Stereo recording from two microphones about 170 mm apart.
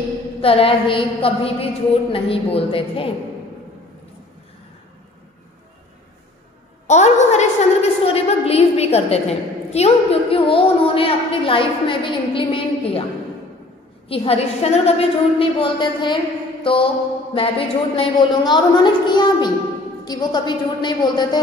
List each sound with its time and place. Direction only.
0.4 s a woman's voice: 35° left (ahead or behind)
6.9 s a woman's voice: 45° left (ahead or behind)
14.0 s a woman's voice: 35° left (ahead or behind)